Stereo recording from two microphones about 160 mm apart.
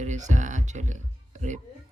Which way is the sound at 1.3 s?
50° right (ahead or behind).